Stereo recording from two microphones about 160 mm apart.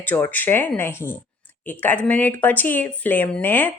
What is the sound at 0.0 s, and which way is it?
Speech, 10° left (ahead or behind).